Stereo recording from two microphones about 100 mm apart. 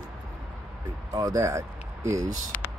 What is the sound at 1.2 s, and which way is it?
Speech, 35° right (ahead or behind).